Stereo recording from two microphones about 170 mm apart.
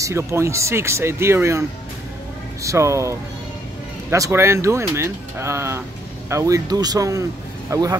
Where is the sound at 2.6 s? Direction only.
20° right (ahead or behind).